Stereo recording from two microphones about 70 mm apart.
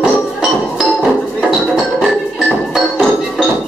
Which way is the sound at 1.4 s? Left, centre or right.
Centre.